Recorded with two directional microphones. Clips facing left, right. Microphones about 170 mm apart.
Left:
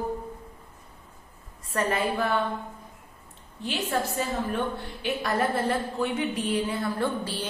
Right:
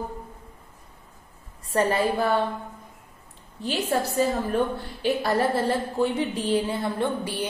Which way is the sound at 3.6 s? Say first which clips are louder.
Right 3 dB; 35° right (ahead or behind).